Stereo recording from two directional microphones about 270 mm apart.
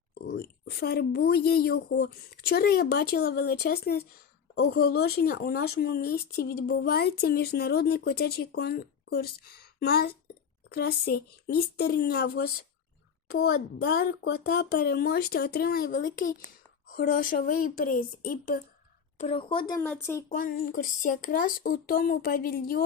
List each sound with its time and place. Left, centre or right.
0.1 s speech: left
19.2 s a woman's voice: centre
20.3 s speech: left